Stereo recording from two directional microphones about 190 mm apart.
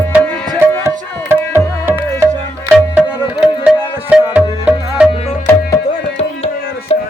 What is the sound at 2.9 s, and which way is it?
Music, 5° right (ahead or behind).